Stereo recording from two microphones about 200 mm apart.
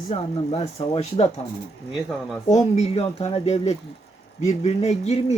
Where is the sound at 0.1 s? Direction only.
30° left (ahead or behind).